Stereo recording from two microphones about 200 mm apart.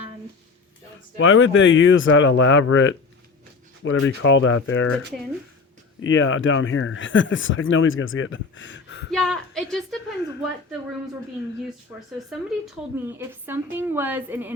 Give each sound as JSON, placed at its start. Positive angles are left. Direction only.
{"t": 1.2, "sound": "speech", "side_deg": 80}
{"t": 6.0, "sound": "speech", "side_deg": 75}
{"t": 9.1, "sound": "a woman's voice", "side_deg": 0}
{"t": 11.9, "sound": "a woman's voice", "side_deg": 0}